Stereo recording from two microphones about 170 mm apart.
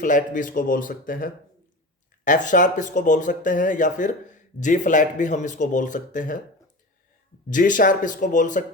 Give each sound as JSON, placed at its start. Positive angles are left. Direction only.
{"t": 0.0, "sound": "speech", "side_deg": 50}
{"t": 7.5, "sound": "speech", "side_deg": 50}